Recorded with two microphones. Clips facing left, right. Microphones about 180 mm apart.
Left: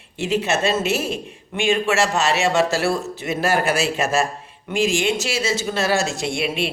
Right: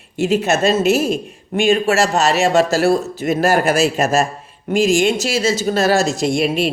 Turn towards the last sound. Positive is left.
turn(degrees=-40)  # may be behind; listen again after turning